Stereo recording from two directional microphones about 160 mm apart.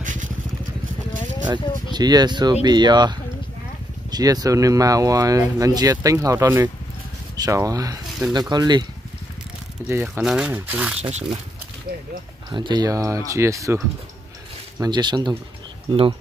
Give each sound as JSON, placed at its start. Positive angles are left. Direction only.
{"t": 0.0, "sound": "vehicle", "side_deg": -50}
{"t": 1.5, "sound": "speech", "side_deg": -25}
{"t": 10.0, "sound": "speech", "side_deg": -5}
{"t": 11.0, "sound": "speech", "side_deg": -45}
{"t": 12.4, "sound": "speech", "side_deg": -25}